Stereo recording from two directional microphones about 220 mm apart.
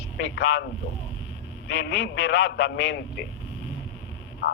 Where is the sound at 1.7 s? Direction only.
55° left (ahead or behind).